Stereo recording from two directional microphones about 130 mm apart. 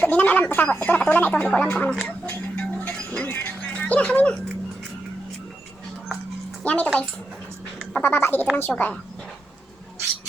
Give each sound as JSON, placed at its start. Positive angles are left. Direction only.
{"t": 0.0, "sound": "speech", "side_deg": 10}
{"t": 2.2, "sound": "music", "side_deg": 15}
{"t": 6.6, "sound": "music", "side_deg": 10}
{"t": 7.9, "sound": "a sound", "side_deg": 15}
{"t": 8.5, "sound": "a woman's voice", "side_deg": 15}